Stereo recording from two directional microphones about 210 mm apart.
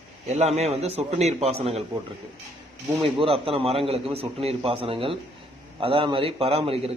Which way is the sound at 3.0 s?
25° right (ahead or behind).